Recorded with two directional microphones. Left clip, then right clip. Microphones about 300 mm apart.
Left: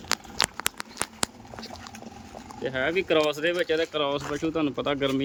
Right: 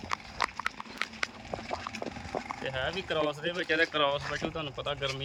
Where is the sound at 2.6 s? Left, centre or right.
Left.